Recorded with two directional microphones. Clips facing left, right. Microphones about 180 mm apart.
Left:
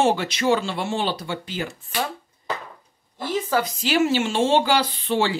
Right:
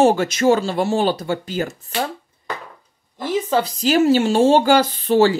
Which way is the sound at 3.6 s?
40° right (ahead or behind).